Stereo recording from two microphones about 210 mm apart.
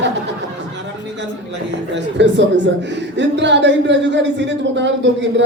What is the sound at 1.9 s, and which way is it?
A woman's voice, 55° right (ahead or behind).